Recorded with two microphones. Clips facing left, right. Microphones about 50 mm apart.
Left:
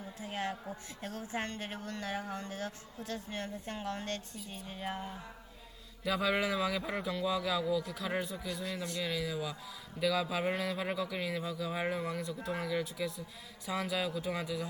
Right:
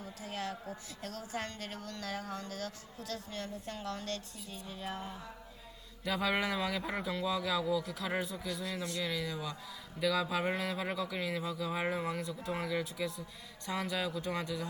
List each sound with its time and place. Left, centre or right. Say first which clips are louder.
0.0 s a woman's voice: left 2 dB; left
6.1 s speech: left 1 dB; centre